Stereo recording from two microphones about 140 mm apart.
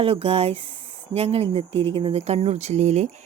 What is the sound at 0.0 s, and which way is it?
A woman's voice, 45° right (ahead or behind).